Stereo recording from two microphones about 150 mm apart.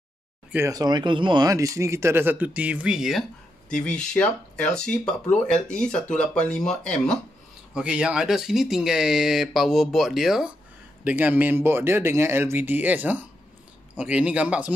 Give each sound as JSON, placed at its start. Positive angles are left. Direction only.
{"t": 0.7, "sound": "a man's voice", "side_deg": -25}
{"t": 7.7, "sound": "speech", "side_deg": -5}